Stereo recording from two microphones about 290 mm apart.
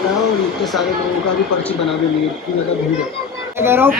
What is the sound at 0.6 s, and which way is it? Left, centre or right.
Speech, centre.